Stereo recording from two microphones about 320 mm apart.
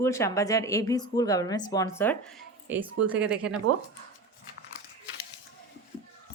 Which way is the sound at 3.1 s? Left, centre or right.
Centre.